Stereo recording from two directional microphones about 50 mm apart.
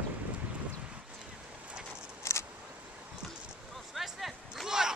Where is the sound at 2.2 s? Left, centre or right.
Left.